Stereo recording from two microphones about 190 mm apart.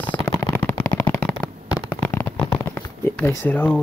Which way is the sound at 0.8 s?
10° left (ahead or behind).